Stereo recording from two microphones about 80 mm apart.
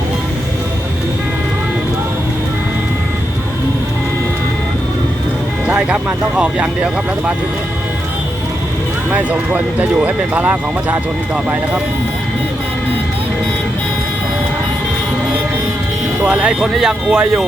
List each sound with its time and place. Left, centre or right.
5.6 s speech: centre
9.0 s speech: centre
16.2 s speech: centre